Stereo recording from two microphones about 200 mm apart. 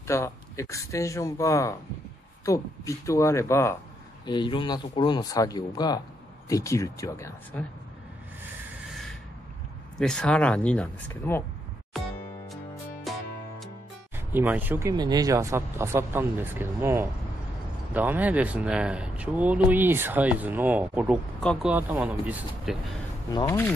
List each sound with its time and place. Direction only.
0.0 s speech: 15° left (ahead or behind)
9.9 s speech: 5° left (ahead or behind)
11.9 s music: centre (ahead or behind)
14.1 s speech: 10° right (ahead or behind)
23.2 s speech: 20° left (ahead or behind)